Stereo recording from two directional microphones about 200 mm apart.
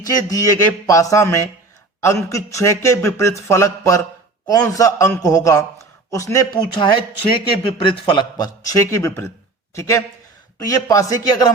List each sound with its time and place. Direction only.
0.0 s a man's voice: 15° left (ahead or behind)